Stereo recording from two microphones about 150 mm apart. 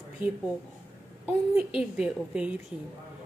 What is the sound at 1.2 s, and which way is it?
A woman's voice, 5° right (ahead or behind).